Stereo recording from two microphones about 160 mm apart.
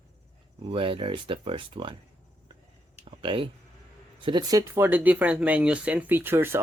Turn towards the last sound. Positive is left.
turn(degrees=-15)  # may be behind; listen again after turning